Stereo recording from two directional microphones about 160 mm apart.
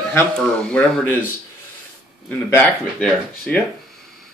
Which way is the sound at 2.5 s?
10° left (ahead or behind).